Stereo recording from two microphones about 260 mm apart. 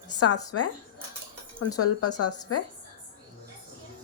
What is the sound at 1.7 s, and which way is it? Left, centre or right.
Speech, left.